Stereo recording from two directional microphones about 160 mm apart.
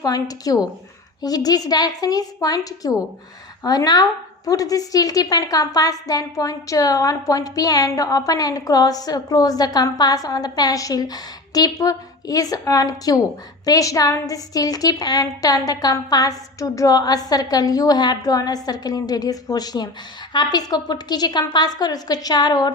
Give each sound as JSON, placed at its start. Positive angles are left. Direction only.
{"t": 0.0, "sound": "a woman's voice", "side_deg": 25}